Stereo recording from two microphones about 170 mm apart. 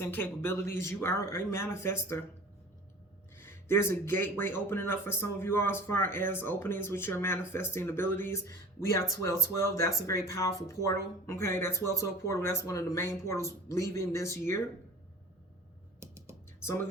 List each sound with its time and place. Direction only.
0.0 s speech: 15° left (ahead or behind)
3.3 s speech: 15° left (ahead or behind)
16.0 s music: 15° right (ahead or behind)
16.6 s music: 15° left (ahead or behind)